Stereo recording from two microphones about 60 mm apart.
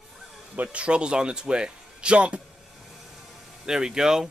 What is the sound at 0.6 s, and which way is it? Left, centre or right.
Speech, right.